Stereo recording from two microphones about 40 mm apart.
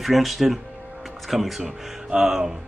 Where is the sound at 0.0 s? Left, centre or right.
Centre.